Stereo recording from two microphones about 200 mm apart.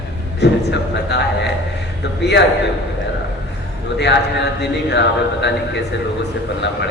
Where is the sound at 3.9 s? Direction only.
60° left (ahead or behind).